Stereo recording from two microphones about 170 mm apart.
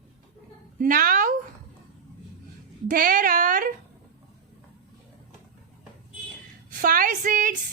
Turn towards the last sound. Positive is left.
turn(degrees=-50)  # may be behind; listen again after turning